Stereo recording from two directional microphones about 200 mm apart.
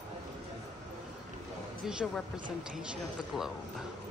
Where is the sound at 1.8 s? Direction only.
Centre (ahead or behind).